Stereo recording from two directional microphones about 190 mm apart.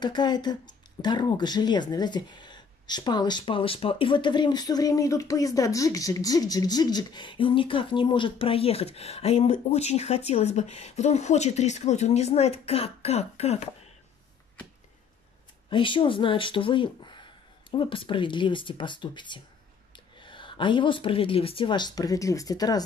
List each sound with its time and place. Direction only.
0.0 s speech: 25° left (ahead or behind)
15.7 s speech: 25° left (ahead or behind)